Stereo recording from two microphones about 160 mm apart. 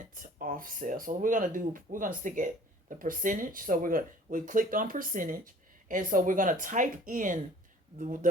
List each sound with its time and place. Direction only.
0.0 s speech: 60° right (ahead or behind)